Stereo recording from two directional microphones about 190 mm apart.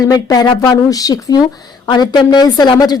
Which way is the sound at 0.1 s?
20° left (ahead or behind).